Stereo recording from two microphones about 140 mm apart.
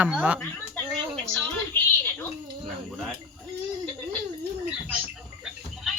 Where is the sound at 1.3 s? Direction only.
10° left (ahead or behind).